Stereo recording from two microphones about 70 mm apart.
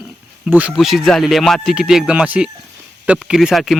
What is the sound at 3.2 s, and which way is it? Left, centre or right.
Speech, centre.